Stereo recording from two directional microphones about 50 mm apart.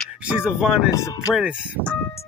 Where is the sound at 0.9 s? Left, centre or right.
Left.